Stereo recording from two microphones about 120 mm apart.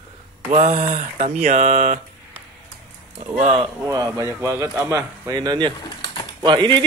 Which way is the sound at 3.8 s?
30° right (ahead or behind).